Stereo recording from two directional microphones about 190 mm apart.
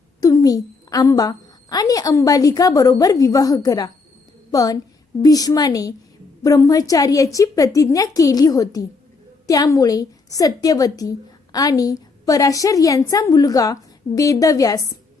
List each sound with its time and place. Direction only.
0.2 s a woman's voice: 20° left (ahead or behind)